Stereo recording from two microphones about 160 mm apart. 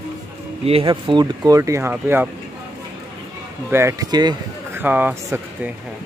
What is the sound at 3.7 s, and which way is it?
Speech, 15° right (ahead or behind).